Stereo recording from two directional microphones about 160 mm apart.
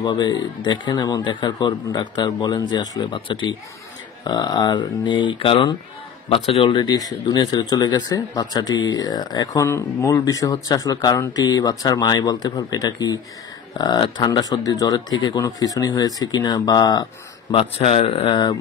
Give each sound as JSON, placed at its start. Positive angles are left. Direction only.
{"t": 0.0, "sound": "speech", "side_deg": 25}